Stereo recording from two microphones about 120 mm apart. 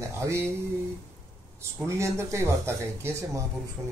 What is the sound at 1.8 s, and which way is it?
Speech, 25° right (ahead or behind).